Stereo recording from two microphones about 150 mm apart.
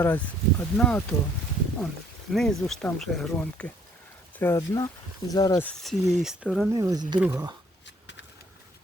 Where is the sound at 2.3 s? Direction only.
Centre (ahead or behind).